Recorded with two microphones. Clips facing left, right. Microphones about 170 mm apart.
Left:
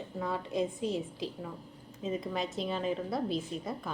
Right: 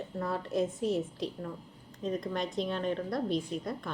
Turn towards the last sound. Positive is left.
turn(degrees=5)  # may be behind; listen again after turning